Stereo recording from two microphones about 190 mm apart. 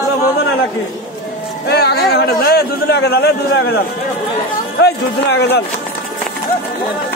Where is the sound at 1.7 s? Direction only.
60° left (ahead or behind).